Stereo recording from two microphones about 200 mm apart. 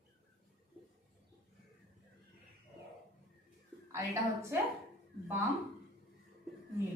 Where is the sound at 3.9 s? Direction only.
15° right (ahead or behind).